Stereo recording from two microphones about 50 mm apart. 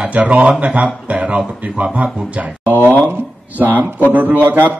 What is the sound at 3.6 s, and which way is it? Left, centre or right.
A woman's voice, right.